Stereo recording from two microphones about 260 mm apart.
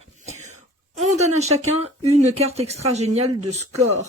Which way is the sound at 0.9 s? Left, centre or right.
Right.